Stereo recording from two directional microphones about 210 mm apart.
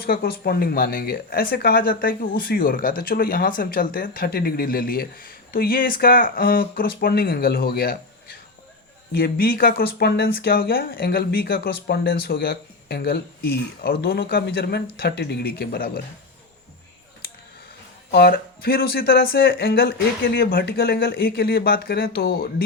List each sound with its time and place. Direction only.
0.0 s speech: 45° left (ahead or behind)
9.1 s speech: 45° left (ahead or behind)
18.1 s speech: 50° left (ahead or behind)